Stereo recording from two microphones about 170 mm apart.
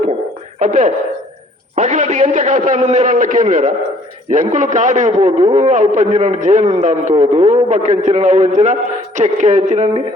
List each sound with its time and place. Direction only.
0.6 s a man's voice: 50° right (ahead or behind)